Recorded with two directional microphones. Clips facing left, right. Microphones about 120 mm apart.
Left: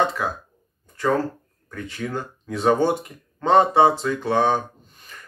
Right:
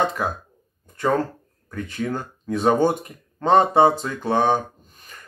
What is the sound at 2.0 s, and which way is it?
Speech, 35° right (ahead or behind).